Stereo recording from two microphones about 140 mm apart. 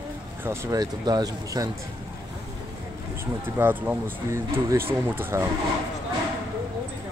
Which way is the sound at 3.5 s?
15° right (ahead or behind).